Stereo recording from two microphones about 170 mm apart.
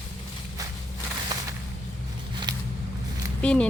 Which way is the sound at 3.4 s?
5° left (ahead or behind).